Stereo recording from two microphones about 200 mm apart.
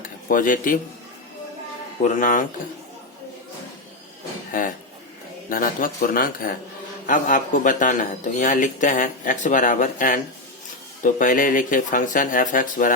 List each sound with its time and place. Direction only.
0.0 s speech: 40° left (ahead or behind)
2.0 s a man's voice: 40° left (ahead or behind)
5.5 s a man's voice: 45° left (ahead or behind)